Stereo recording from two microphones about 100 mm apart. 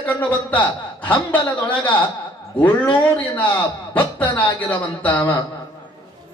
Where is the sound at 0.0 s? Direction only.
15° left (ahead or behind).